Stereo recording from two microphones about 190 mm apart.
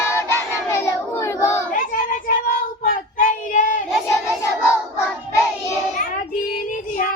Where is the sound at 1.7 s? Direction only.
45° left (ahead or behind).